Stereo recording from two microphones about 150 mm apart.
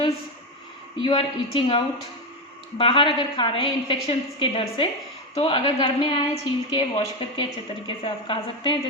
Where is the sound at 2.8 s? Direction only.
35° left (ahead or behind).